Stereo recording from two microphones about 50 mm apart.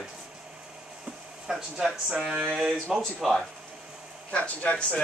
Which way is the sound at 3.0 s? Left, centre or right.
Centre.